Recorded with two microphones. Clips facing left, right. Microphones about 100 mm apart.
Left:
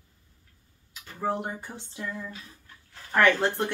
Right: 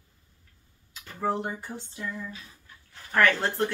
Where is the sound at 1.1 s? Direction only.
10° left (ahead or behind).